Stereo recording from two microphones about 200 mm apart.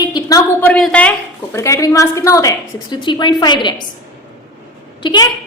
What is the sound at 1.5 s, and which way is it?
A woman's voice, 15° left (ahead or behind).